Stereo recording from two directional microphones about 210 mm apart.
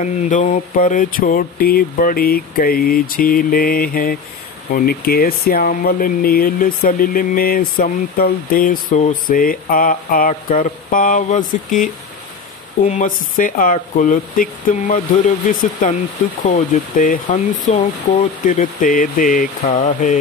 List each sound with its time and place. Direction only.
0.0 s speech: 35° left (ahead or behind)